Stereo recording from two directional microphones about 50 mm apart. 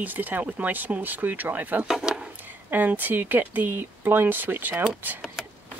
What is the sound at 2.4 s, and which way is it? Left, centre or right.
Speech, right.